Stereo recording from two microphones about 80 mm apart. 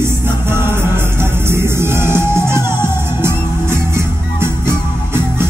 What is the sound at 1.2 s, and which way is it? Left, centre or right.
Music, right.